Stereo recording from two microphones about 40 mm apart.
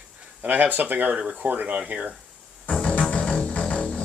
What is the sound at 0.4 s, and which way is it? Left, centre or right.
Speech, right.